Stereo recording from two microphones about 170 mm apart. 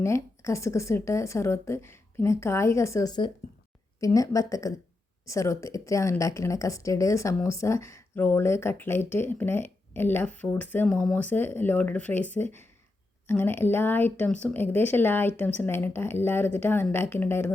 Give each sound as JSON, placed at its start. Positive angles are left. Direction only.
{"t": 0.0, "sound": "a woman's voice", "side_deg": 15}